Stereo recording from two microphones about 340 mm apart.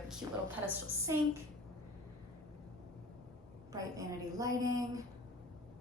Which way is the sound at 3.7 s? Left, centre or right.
Centre.